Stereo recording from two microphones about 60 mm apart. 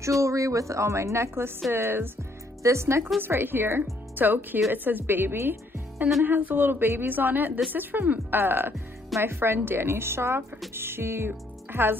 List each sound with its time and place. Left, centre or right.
0.2 s a woman's voice: right
3.2 s a woman's voice: right